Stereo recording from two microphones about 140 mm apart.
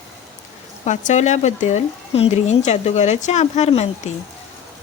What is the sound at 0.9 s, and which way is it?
Speech, 60° left (ahead or behind).